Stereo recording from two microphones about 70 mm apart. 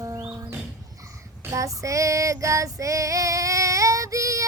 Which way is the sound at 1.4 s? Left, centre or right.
Right.